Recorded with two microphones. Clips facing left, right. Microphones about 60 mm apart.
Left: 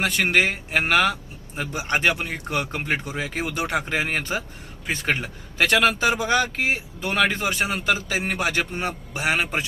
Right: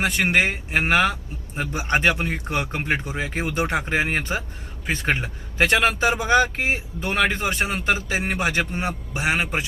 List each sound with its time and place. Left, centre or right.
0.0 s speech: right